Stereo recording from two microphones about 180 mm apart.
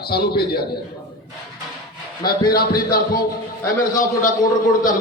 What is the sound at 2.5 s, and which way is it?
Speech, 60° left (ahead or behind).